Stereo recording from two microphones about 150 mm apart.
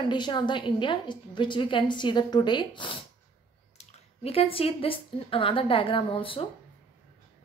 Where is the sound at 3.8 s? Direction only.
45° left (ahead or behind).